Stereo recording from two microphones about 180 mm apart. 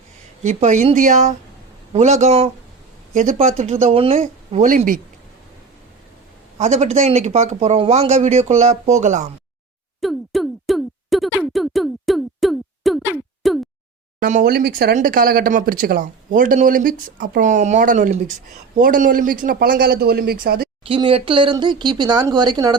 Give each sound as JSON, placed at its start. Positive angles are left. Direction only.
{"t": 0.4, "sound": "speech", "side_deg": -40}
{"t": 4.2, "sound": "speech", "side_deg": -45}
{"t": 6.6, "sound": "speech", "side_deg": -40}
{"t": 10.0, "sound": "a sound", "side_deg": 0}
{"t": 14.2, "sound": "speech", "side_deg": -45}
{"t": 14.5, "sound": "speech", "side_deg": -60}
{"t": 20.8, "sound": "speech", "side_deg": -30}